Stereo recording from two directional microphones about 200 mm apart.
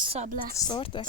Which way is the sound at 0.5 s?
20° left (ahead or behind).